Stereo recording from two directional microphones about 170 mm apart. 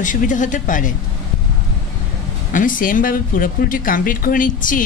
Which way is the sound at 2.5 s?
50° left (ahead or behind).